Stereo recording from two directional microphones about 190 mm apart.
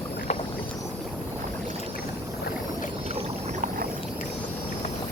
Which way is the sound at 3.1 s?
35° right (ahead or behind).